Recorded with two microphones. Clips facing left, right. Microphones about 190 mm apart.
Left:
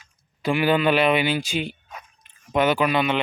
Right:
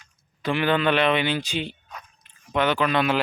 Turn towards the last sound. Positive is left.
turn(degrees=10)  # may be behind; listen again after turning